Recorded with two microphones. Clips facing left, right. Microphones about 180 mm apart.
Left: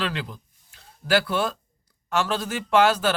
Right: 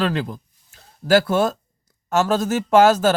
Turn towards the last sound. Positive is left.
turn(degrees=-45)  # may be behind; listen again after turning